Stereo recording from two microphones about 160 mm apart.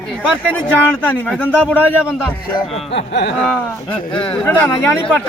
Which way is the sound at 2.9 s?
90° left.